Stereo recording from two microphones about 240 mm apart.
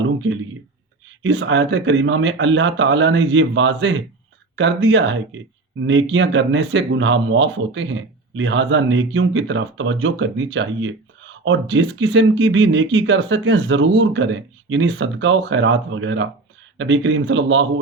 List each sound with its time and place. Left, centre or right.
1.2 s speech: right